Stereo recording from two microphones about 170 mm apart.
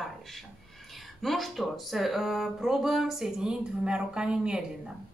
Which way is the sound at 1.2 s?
Centre (ahead or behind).